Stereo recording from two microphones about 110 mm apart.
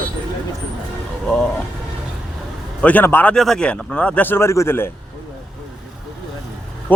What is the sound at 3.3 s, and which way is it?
A man's voice, 5° left (ahead or behind).